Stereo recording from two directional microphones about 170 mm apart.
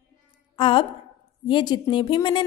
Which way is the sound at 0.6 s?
30° left (ahead or behind).